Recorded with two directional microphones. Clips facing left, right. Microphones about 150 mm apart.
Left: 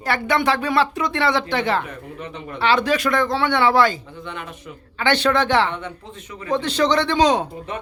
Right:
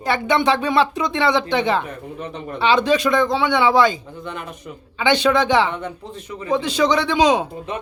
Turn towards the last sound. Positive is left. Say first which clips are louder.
# right 1 dB
turn(degrees=-15)  # may be behind; listen again after turning